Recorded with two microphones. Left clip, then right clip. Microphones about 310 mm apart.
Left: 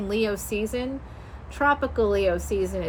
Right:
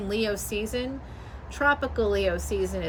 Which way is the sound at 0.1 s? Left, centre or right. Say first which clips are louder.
Left 2 dB; centre.